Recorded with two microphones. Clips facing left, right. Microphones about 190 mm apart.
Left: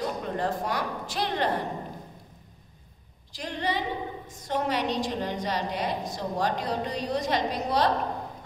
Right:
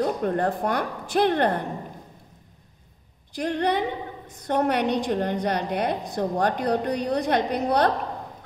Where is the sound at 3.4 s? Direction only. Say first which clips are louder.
Right 6 dB; 60° right (ahead or behind).